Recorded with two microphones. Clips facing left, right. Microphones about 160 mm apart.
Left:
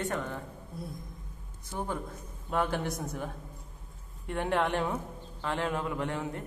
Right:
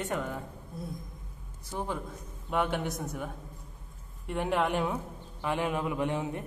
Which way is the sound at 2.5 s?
Centre (ahead or behind).